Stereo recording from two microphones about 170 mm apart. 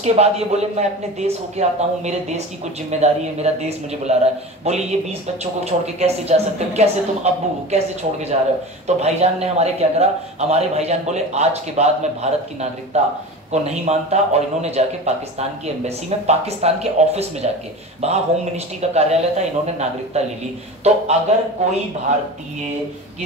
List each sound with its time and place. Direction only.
0.0 s speech: 40° right (ahead or behind)